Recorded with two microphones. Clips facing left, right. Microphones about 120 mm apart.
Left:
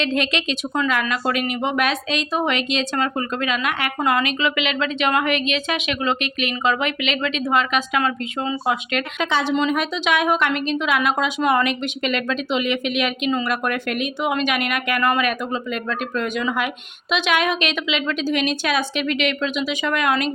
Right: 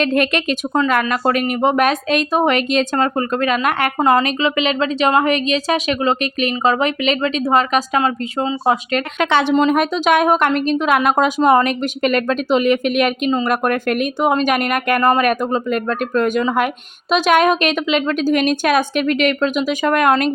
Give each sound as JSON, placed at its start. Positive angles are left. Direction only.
{"t": 0.0, "sound": "a woman's voice", "side_deg": -50}
{"t": 9.1, "sound": "speech", "side_deg": -60}
{"t": 9.6, "sound": "a woman's voice", "side_deg": -45}